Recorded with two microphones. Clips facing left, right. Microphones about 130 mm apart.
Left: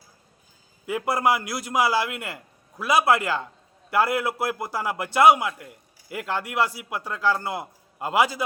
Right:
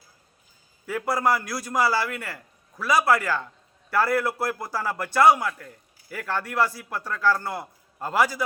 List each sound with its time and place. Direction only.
0.9 s a man's voice: 20° left (ahead or behind)